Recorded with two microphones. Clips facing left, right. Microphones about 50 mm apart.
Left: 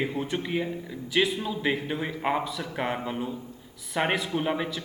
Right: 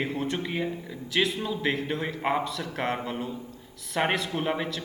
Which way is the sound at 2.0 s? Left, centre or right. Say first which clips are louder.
Even; centre.